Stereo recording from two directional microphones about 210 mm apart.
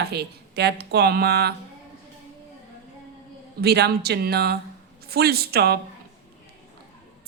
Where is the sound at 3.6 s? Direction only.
50° right (ahead or behind).